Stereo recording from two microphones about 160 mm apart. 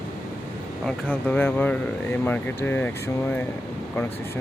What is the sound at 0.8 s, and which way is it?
Speech, 10° left (ahead or behind).